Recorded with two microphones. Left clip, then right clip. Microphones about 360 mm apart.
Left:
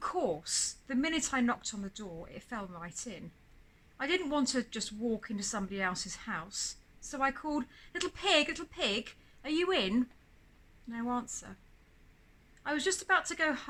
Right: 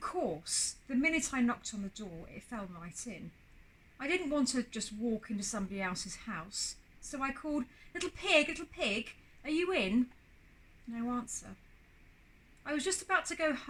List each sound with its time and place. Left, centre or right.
0.4 s a woman's voice: centre
10.9 s a woman's voice: centre
12.6 s a woman's voice: centre